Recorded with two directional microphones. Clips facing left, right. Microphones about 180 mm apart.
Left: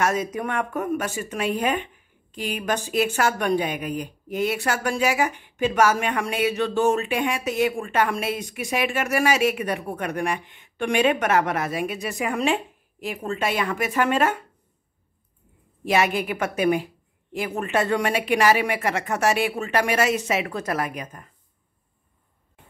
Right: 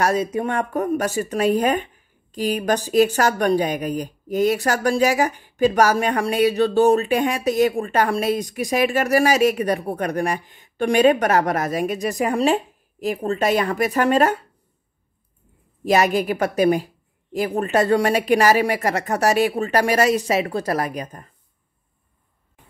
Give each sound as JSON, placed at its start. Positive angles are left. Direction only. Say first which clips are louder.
{"t": 0.0, "sound": "speech", "louder": "right 4 dB", "side_deg": -30}
{"t": 15.8, "sound": "speech", "louder": "right 4 dB", "side_deg": -40}